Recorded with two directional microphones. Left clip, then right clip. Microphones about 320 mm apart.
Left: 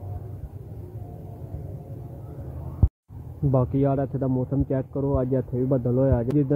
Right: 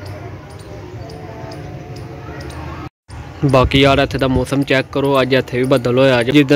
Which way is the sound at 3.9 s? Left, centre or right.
Right.